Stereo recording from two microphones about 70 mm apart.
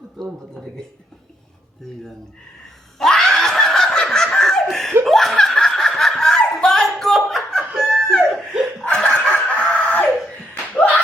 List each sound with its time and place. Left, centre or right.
0.5 s a woman's voice: centre
3.0 s snicker: centre
5.0 s laughter: centre
5.9 s snicker: centre
7.8 s a sound: centre
8.4 s laughter: centre
8.8 s chicken: centre
10.5 s slap: left